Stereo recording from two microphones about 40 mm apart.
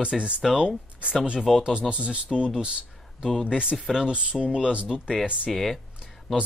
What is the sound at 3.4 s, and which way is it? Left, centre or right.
Speech, right.